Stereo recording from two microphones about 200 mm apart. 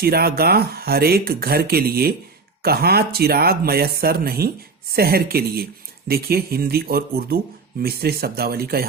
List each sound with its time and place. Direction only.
0.0 s speech: 50° right (ahead or behind)